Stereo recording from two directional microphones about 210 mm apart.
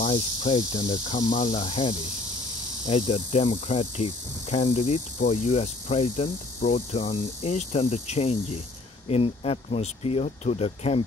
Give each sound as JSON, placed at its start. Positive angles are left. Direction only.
{"t": 0.0, "sound": "speech", "side_deg": 25}
{"t": 2.9, "sound": "cricket", "side_deg": 30}
{"t": 9.0, "sound": "speech", "side_deg": 25}